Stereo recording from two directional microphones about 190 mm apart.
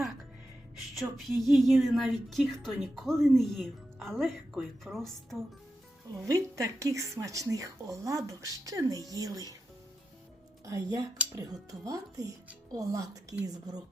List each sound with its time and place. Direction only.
0.9 s a woman's voice: centre (ahead or behind)
6.1 s speech: 15° right (ahead or behind)
10.7 s speech: 20° right (ahead or behind)
11.2 s speech: 5° right (ahead or behind)
11.7 s speech: 20° right (ahead or behind)